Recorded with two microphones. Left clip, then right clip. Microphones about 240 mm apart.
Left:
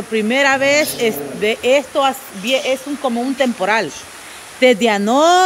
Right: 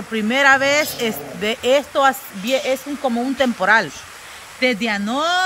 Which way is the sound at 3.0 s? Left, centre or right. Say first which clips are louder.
Left 1 dB; right.